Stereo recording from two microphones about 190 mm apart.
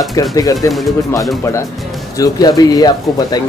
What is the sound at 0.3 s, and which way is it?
Speech, 20° left (ahead or behind).